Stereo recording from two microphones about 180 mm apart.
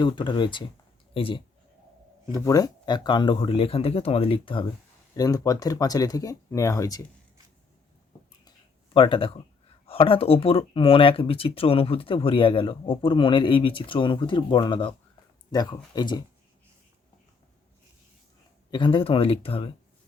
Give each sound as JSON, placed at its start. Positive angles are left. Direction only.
{"t": 0.0, "sound": "a man's voice", "side_deg": 25}
{"t": 2.4, "sound": "speech", "side_deg": 20}
{"t": 8.4, "sound": "a sound", "side_deg": 30}
{"t": 9.8, "sound": "speech", "side_deg": 30}
{"t": 18.7, "sound": "speech", "side_deg": 25}